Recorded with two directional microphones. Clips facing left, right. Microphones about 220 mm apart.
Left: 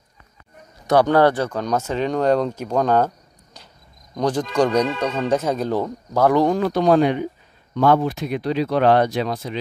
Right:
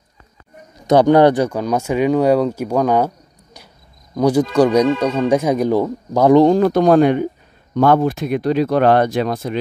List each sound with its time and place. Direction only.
0.8 s speech: 20° right (ahead or behind)
4.1 s speech: 10° right (ahead or behind); by 6.6 s 25° right (ahead or behind)
6.6 s speech: 50° right (ahead or behind)